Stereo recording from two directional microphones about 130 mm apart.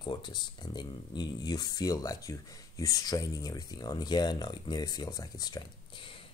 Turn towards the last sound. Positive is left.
turn(degrees=40)  # may be behind; listen again after turning